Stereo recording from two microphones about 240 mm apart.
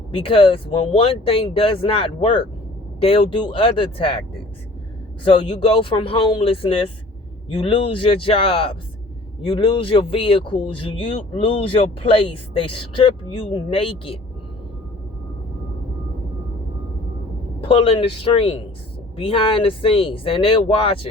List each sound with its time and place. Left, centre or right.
0.2 s speech: left
5.2 s speech: left
17.6 s speech: left